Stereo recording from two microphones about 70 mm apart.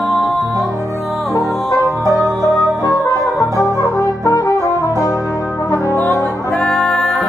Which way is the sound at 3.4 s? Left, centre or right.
Left.